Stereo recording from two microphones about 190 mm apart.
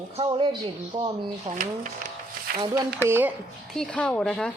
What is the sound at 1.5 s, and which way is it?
Speech, 45° right (ahead or behind).